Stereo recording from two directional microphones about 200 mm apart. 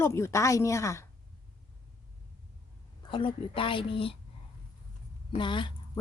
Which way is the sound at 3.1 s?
25° left (ahead or behind).